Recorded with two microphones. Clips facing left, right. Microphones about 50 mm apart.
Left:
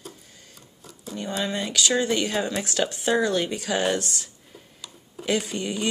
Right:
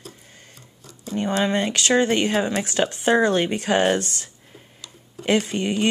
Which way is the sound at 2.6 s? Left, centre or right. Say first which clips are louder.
Right 3 dB; right.